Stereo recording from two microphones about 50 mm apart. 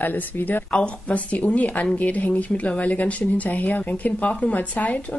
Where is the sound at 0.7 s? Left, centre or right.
Left.